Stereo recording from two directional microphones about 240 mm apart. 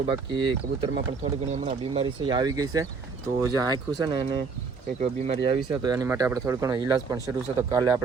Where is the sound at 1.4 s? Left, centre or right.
Right.